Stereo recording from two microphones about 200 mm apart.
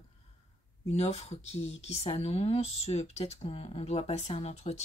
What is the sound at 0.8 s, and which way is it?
Speech, 30° left (ahead or behind).